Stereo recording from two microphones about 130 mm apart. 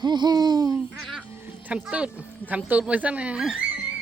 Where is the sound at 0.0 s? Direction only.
35° right (ahead or behind).